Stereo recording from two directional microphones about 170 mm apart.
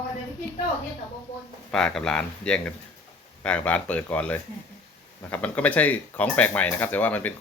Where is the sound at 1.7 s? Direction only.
5° left (ahead or behind).